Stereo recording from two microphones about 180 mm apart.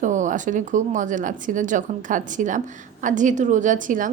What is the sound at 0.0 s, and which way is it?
Speech, 45° right (ahead or behind).